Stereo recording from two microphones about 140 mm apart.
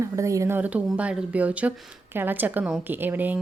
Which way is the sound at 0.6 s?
10° right (ahead or behind).